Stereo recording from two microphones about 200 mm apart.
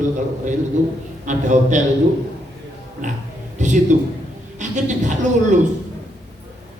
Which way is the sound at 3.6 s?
35° right (ahead or behind).